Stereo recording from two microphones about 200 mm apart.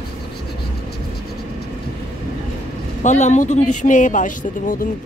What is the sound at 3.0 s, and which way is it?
Speech, 35° left (ahead or behind).